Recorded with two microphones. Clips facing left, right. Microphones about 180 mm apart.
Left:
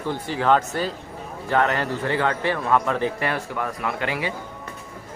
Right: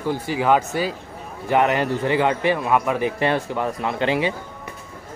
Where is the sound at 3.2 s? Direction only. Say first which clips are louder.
Right 5 dB; 25° right (ahead or behind).